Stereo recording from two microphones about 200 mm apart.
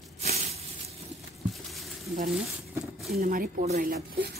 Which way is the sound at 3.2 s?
45° right (ahead or behind).